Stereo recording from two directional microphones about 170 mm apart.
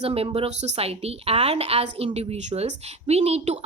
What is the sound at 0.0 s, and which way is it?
A woman's voice, 35° right (ahead or behind).